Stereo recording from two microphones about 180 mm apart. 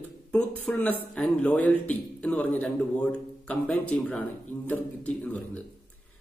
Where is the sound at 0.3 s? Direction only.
5° left (ahead or behind).